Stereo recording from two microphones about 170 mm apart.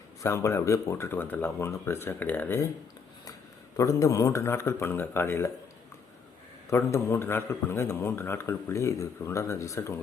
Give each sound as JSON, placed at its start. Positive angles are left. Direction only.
{"t": 0.2, "sound": "a man's voice", "side_deg": 15}
{"t": 3.8, "sound": "a man's voice", "side_deg": 20}
{"t": 6.7, "sound": "a man's voice", "side_deg": 15}